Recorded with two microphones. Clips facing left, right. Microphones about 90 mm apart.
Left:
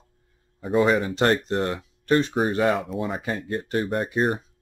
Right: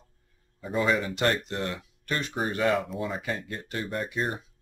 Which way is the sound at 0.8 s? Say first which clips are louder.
Left 4 dB; 30° left (ahead or behind).